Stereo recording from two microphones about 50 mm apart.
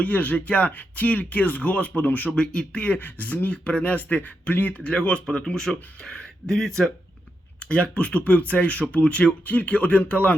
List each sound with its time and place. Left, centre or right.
0.0 s speech: left
2.3 s speech: centre
3.0 s speech: left; by 6.9 s centre
7.6 s speech: left